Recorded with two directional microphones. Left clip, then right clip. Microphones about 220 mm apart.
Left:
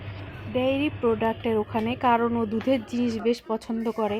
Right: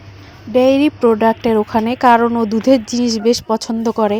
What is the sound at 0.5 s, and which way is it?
Speech, 45° right (ahead or behind).